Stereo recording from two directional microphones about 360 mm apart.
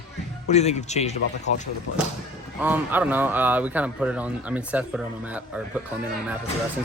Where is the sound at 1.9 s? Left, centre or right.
Left.